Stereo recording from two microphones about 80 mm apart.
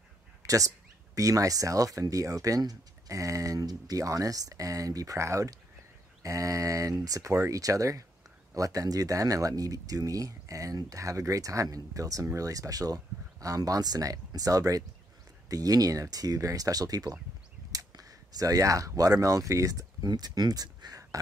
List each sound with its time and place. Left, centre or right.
0.4 s speech: right